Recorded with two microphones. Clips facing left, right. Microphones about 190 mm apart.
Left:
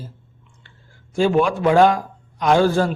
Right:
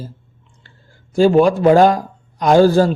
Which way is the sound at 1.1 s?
35° right (ahead or behind).